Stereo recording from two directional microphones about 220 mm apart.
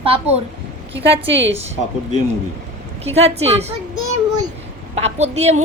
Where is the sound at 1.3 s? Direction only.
55° right (ahead or behind).